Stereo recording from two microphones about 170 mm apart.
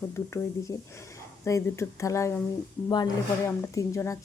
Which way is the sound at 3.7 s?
15° left (ahead or behind).